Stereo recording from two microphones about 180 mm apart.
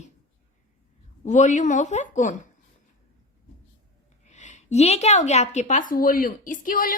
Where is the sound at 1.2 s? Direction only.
45° left (ahead or behind).